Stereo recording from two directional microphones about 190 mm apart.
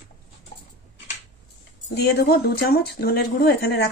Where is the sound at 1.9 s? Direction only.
55° left (ahead or behind).